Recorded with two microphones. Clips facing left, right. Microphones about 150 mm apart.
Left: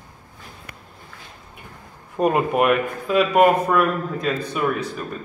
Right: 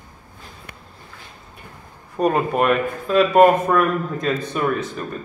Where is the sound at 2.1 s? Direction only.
15° left (ahead or behind).